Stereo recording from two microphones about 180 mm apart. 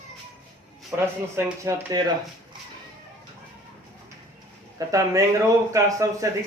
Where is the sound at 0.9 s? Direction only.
10° right (ahead or behind).